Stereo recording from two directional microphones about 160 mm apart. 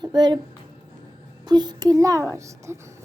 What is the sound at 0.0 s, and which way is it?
Speech, 25° right (ahead or behind).